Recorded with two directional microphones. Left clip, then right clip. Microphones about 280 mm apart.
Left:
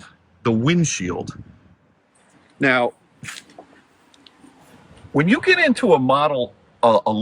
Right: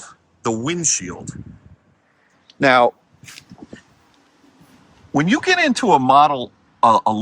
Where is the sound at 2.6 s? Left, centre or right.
Centre.